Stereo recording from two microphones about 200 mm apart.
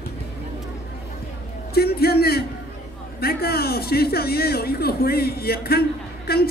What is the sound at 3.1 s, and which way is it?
A man's voice, 50° left (ahead or behind).